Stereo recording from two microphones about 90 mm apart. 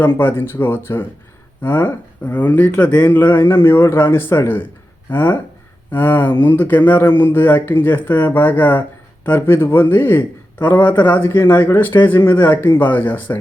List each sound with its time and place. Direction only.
0.2 s speech: 25° left (ahead or behind)